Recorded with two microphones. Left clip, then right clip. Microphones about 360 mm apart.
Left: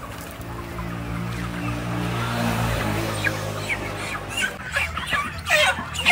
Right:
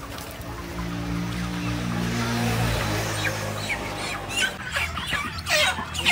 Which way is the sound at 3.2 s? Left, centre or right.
Right.